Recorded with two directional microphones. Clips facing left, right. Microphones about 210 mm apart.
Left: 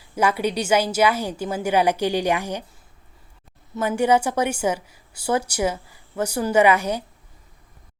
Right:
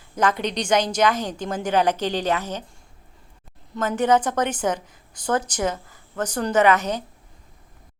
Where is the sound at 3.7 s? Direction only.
5° left (ahead or behind).